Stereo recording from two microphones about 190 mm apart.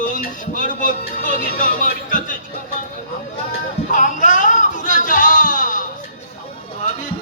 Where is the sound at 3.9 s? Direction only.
40° left (ahead or behind).